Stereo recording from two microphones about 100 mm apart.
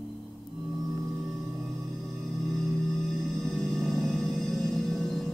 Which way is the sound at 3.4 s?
Centre (ahead or behind).